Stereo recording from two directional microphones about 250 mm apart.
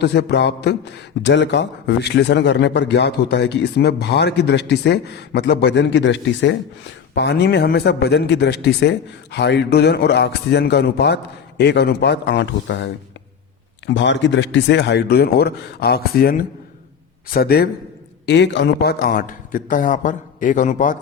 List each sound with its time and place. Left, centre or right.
0.0 s a man's voice: left